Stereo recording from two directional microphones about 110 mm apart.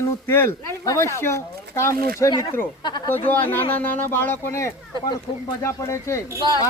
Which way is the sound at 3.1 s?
20° left (ahead or behind).